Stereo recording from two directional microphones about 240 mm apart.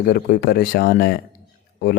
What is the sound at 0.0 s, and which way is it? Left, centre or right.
Speech, left.